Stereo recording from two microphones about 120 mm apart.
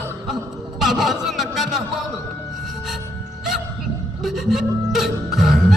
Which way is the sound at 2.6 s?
Centre (ahead or behind).